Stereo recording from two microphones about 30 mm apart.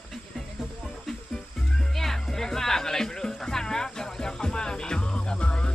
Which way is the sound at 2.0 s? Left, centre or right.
Centre.